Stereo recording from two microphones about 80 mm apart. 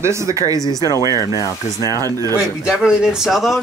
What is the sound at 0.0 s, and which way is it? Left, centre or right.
Speech, right.